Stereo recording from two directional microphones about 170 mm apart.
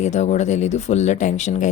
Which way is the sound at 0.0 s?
40° left (ahead or behind).